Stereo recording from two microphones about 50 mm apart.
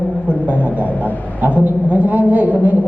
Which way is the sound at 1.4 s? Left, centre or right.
Right.